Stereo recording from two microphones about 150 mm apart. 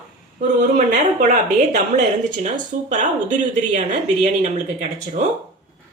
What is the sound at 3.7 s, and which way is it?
Speech, 55° right (ahead or behind).